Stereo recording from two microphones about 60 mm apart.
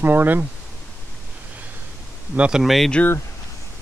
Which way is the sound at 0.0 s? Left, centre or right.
Right.